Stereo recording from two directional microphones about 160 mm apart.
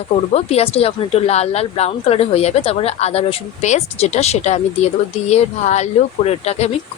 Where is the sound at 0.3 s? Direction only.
40° left (ahead or behind).